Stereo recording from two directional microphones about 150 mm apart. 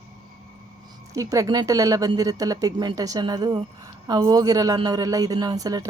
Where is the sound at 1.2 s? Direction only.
20° right (ahead or behind).